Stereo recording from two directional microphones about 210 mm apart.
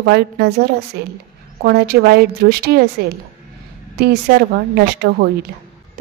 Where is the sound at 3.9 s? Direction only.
50° right (ahead or behind).